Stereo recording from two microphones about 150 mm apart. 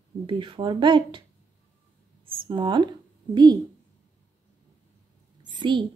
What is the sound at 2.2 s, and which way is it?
Speech, 35° right (ahead or behind).